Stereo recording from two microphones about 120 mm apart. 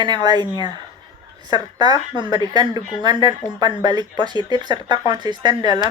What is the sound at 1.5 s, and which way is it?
Speech, 35° right (ahead or behind).